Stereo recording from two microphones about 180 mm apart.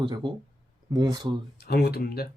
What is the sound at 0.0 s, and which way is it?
Speech, 25° right (ahead or behind).